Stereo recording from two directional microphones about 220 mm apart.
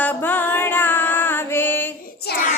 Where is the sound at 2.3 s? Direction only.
45° left (ahead or behind).